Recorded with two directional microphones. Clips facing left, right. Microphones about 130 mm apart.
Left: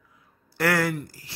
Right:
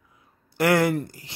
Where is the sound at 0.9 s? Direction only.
30° right (ahead or behind).